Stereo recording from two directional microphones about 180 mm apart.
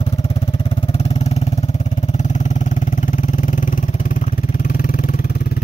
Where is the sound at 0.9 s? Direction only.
35° left (ahead or behind); by 5.2 s 55° left (ahead or behind).